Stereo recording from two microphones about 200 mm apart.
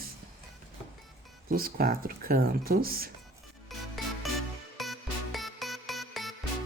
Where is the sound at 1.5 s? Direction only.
45° right (ahead or behind).